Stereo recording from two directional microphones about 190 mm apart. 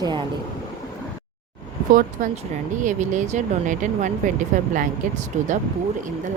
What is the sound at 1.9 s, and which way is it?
Speech, 45° right (ahead or behind).